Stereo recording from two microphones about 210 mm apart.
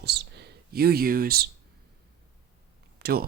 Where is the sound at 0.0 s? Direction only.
50° right (ahead or behind).